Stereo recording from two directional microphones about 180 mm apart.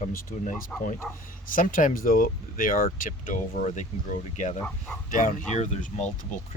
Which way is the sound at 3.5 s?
40° left (ahead or behind).